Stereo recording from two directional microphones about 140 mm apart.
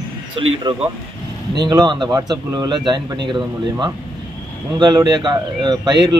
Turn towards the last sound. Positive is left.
turn(degrees=-30)  # may be behind; listen again after turning